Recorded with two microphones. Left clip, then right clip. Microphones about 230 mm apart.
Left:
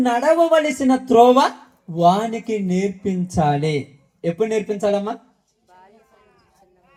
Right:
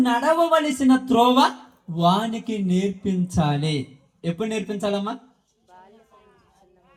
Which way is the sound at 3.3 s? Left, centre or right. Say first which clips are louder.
Left 7 dB; right.